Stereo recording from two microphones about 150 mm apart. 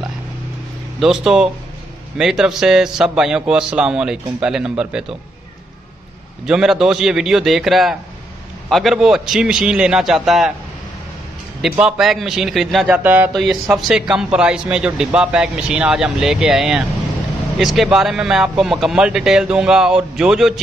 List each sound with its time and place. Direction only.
0.9 s a man's voice: 5° right (ahead or behind)
6.4 s a man's voice: 5° right (ahead or behind)
11.8 s a man's voice: centre (ahead or behind)